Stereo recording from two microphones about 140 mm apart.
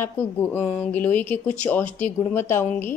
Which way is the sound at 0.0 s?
15° left (ahead or behind).